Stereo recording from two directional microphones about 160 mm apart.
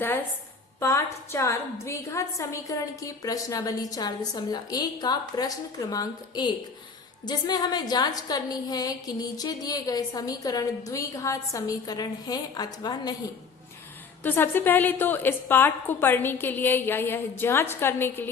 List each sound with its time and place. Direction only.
0.8 s a woman's voice: 20° left (ahead or behind)
14.3 s a woman's voice: 15° left (ahead or behind)